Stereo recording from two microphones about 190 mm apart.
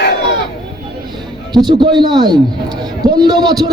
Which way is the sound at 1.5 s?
25° right (ahead or behind).